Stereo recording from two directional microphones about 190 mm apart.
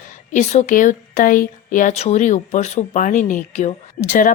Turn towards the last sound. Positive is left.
turn(degrees=45)  # may be behind; listen again after turning